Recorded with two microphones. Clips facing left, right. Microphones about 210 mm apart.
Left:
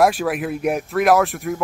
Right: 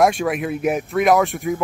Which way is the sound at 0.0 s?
Centre (ahead or behind).